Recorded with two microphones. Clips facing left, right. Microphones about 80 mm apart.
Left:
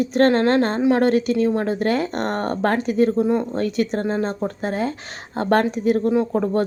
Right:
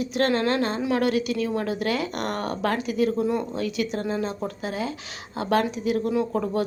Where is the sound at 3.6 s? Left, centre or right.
Left.